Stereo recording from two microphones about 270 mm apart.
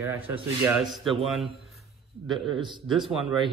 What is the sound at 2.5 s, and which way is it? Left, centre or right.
Speech, centre.